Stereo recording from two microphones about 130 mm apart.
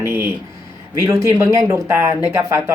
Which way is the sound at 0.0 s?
20° right (ahead or behind).